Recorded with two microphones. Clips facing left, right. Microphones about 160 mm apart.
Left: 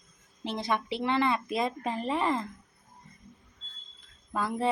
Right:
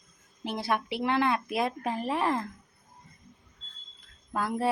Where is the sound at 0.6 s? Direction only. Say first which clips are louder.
Right 1 dB; 5° right (ahead or behind).